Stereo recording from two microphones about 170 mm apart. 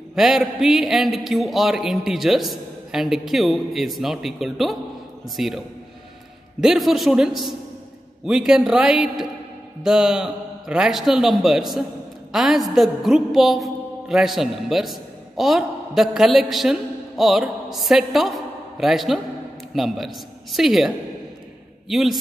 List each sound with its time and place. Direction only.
0.1 s a man's voice: centre (ahead or behind)
6.6 s a man's voice: centre (ahead or behind)
12.3 s a sound: centre (ahead or behind)
16.3 s a man's voice: centre (ahead or behind)